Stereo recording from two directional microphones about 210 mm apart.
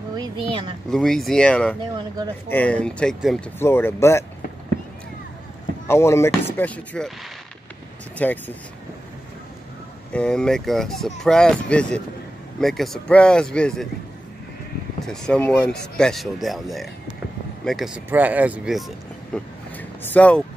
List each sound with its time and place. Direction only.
0.5 s speech: 25° right (ahead or behind)
0.8 s speech: centre (ahead or behind)
1.8 s speech: 20° right (ahead or behind)
2.5 s speech: 5° left (ahead or behind)
5.9 s speech: 10° left (ahead or behind)
8.2 s speech: 10° left (ahead or behind)
10.1 s speech: 5° left (ahead or behind)
15.0 s speech: 5° left (ahead or behind)
19.3 s vehicle: 10° left (ahead or behind)